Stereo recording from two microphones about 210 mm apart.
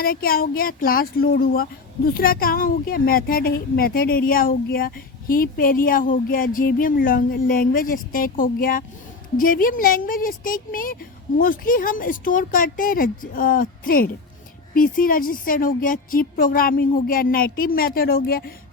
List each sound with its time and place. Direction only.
0.0 s speech: 45° left (ahead or behind)